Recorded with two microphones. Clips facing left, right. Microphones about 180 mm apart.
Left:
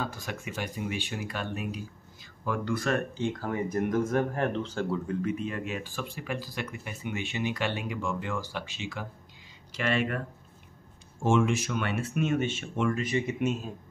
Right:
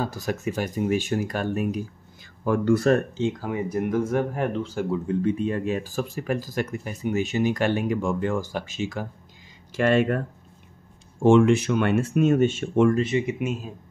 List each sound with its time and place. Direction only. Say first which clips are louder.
0.0 s speech: right 8 dB; 40° right (ahead or behind)
3.2 s speech: right 4 dB; 15° right (ahead or behind)
5.2 s speech: right 7 dB; 30° right (ahead or behind)
11.2 s speech: right 9 dB; 60° right (ahead or behind)
13.1 s speech: right 5 dB; 20° right (ahead or behind)